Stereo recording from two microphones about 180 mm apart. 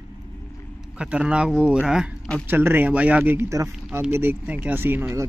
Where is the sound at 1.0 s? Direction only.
5° right (ahead or behind).